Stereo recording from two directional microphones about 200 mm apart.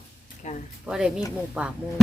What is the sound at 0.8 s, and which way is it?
Speech, 5° right (ahead or behind).